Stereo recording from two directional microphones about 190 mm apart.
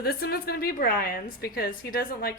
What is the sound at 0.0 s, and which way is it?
A woman's voice, 55° left (ahead or behind).